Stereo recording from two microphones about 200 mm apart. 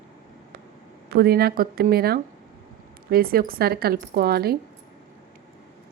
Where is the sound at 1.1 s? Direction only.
50° right (ahead or behind).